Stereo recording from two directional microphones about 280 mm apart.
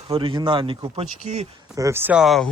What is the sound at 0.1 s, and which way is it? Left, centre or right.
Speech, centre.